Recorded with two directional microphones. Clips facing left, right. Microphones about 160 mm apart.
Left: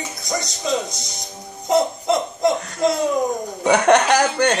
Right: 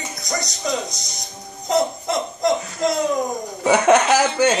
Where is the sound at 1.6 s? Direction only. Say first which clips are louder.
Left 2 dB; 5° left (ahead or behind).